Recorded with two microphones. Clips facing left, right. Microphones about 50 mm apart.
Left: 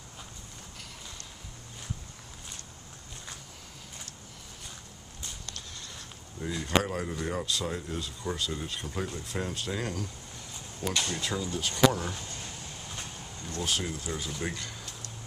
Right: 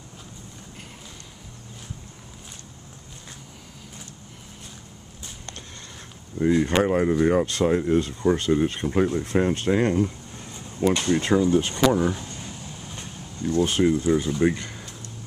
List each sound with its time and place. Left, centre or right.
6.4 s speech: right
12.0 s a sound: centre
13.4 s speech: centre
13.7 s speech: right